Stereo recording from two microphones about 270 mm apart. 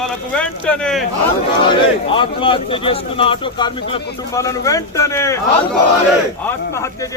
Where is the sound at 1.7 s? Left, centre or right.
Centre.